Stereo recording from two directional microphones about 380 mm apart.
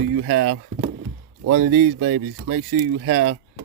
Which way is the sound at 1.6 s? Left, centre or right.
Right.